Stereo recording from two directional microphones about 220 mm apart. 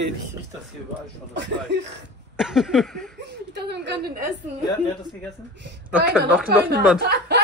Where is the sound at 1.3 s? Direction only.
55° right (ahead or behind).